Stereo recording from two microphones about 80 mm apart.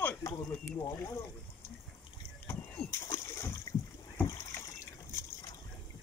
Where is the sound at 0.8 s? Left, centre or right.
Left.